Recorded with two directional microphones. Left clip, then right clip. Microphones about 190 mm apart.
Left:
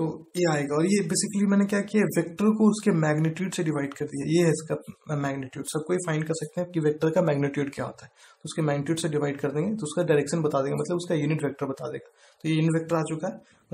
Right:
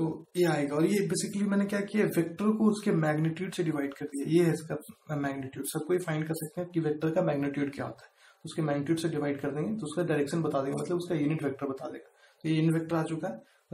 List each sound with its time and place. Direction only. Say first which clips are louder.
0.3 s speech: left 3 dB; 40° left (ahead or behind)